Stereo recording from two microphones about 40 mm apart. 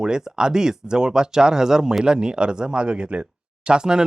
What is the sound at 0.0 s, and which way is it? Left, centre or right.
Speech, centre.